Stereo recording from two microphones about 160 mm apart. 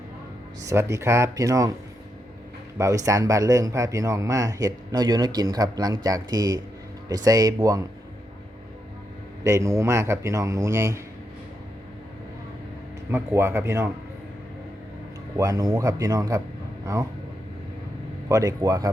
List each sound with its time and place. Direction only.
0.6 s speech: 20° right (ahead or behind)
2.7 s speech: 20° right (ahead or behind)
9.4 s speech: 20° right (ahead or behind)
13.1 s speech: 15° right (ahead or behind)
15.4 s speech: 20° right (ahead or behind)
18.3 s speech: 20° right (ahead or behind)